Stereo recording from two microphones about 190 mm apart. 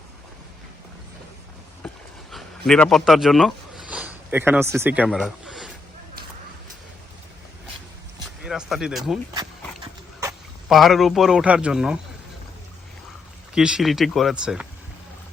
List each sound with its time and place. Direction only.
1.8 s a sound: 5° left (ahead or behind)
8.4 s a man's voice: 5° right (ahead or behind)
9.3 s horse: 20° right (ahead or behind)
10.7 s a man's voice: centre (ahead or behind)
13.5 s a man's voice: 5° right (ahead or behind)